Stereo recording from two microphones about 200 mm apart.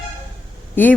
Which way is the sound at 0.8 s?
10° left (ahead or behind).